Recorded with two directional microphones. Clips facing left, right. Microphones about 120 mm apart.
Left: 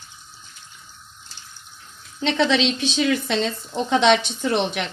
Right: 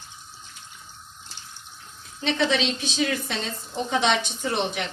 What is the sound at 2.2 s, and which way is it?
Speech, 90° left.